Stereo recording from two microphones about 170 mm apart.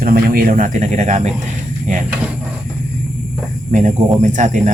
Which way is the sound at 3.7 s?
45° right (ahead or behind).